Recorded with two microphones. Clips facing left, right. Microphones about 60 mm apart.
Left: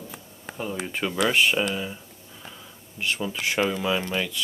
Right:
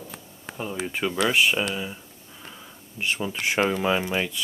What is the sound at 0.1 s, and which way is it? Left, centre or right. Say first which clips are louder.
Speech: even; centre.